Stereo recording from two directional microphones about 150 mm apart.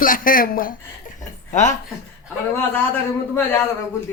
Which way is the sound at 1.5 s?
55° left (ahead or behind).